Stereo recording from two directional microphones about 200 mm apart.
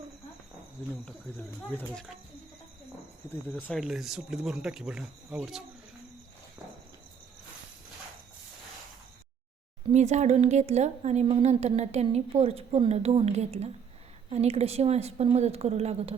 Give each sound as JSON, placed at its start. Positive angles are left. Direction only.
{"t": 1.7, "sound": "speech", "side_deg": 5}
{"t": 3.5, "sound": "speech", "side_deg": 0}
{"t": 9.9, "sound": "a woman's voice", "side_deg": -35}